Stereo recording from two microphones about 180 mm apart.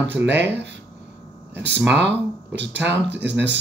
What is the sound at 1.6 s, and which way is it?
Speech, 75° right (ahead or behind).